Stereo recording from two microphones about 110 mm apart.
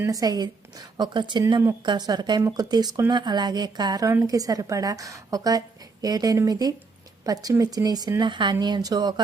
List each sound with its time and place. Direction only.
0.0 s a woman's voice: 35° right (ahead or behind)
4.0 s a woman's voice: 25° right (ahead or behind)